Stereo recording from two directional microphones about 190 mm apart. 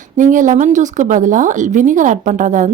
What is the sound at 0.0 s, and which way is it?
Speech, 40° right (ahead or behind).